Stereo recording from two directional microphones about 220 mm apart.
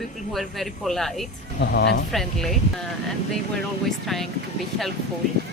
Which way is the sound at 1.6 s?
50° left (ahead or behind).